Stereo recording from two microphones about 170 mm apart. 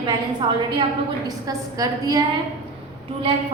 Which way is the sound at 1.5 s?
20° right (ahead or behind).